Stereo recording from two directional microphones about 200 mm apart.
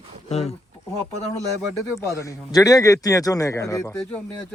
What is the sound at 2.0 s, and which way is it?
Speech, 15° left (ahead or behind).